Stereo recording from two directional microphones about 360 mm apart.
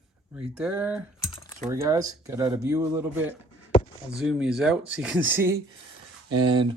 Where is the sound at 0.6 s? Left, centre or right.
Centre.